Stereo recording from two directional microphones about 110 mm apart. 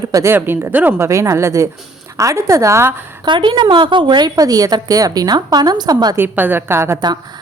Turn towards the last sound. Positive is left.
turn(degrees=-20)  # may be behind; listen again after turning